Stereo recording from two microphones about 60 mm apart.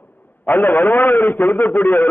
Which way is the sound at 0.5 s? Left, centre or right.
Left.